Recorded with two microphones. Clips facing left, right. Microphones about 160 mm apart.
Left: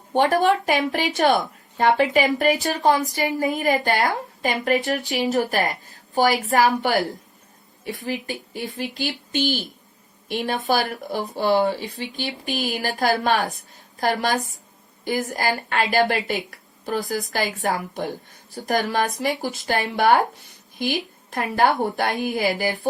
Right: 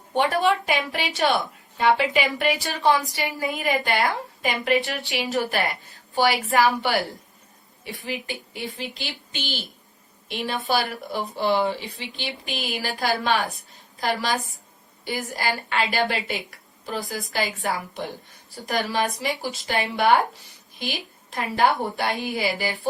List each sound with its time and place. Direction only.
0.1 s a woman's voice: 45° left (ahead or behind)
8.0 s a woman's voice: 40° left (ahead or behind)